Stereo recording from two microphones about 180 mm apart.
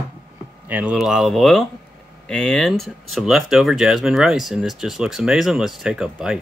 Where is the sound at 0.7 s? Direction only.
10° right (ahead or behind).